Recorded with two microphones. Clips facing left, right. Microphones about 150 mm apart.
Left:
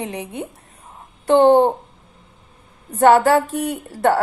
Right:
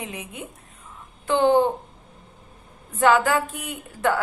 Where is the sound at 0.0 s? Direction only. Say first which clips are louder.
Left 7 dB; 35° left (ahead or behind).